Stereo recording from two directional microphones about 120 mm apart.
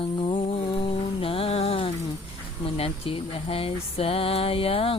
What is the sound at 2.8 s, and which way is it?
Speech, 55° left (ahead or behind).